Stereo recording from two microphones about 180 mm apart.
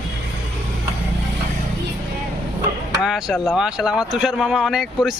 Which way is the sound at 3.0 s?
Centre (ahead or behind).